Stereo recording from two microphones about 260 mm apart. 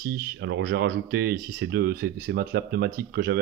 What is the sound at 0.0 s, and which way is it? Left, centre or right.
Speech, right.